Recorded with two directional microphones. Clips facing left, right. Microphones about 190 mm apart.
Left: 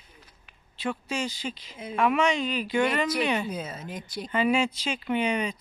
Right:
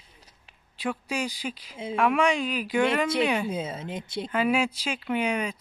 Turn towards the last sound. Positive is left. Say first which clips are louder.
# even
turn(degrees=-5)  # may be behind; listen again after turning